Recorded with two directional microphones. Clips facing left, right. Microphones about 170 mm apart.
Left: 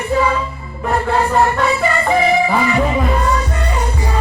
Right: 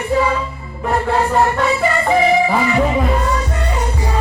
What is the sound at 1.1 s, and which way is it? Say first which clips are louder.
Music: left 1 dB; 20° right (ahead or behind).